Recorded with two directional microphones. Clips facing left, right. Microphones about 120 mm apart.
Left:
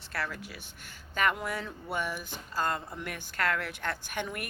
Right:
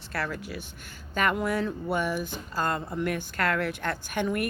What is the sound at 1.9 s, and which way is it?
A woman's voice, 35° right (ahead or behind).